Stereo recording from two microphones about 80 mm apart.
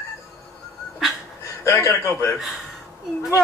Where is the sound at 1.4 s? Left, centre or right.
Left.